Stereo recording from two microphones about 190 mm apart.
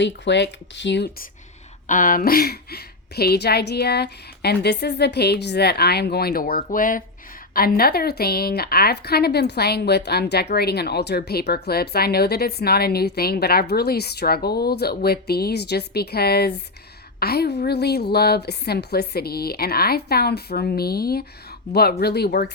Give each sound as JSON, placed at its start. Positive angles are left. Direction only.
{"t": 0.0, "sound": "speech", "side_deg": 65}
{"t": 1.9, "sound": "a woman's voice", "side_deg": 45}